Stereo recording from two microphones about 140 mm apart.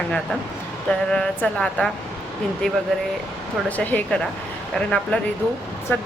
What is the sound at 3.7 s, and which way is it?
Speech, 10° left (ahead or behind).